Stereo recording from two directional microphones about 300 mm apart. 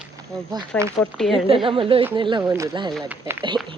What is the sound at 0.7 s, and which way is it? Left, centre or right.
Speech, centre.